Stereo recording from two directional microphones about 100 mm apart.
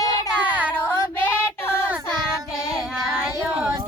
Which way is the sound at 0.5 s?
15° right (ahead or behind).